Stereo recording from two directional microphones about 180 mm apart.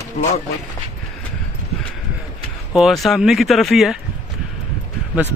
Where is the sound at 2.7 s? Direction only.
Centre (ahead or behind).